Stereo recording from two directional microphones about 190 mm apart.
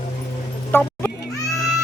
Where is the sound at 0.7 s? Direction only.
10° left (ahead or behind).